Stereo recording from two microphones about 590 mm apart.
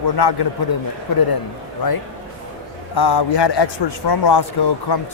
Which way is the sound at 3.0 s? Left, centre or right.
Left.